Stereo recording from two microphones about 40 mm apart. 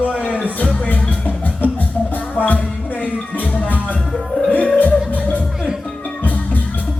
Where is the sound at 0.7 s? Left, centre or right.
Left.